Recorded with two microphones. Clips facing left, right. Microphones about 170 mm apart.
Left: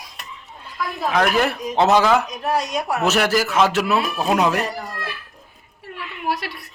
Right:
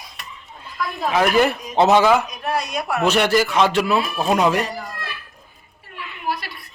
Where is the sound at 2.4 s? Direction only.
40° left (ahead or behind).